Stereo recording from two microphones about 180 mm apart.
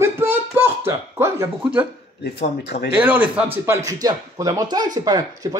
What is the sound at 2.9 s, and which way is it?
Speech, 10° right (ahead or behind).